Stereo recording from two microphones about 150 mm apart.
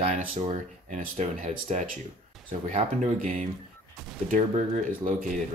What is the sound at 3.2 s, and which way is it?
Speech, 60° right (ahead or behind).